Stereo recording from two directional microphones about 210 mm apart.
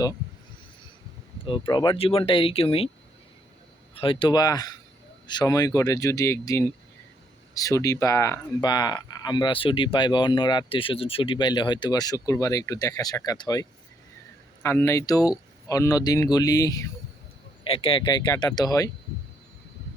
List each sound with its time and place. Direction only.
1.5 s speech: 25° left (ahead or behind)
3.9 s speech: 25° left (ahead or behind)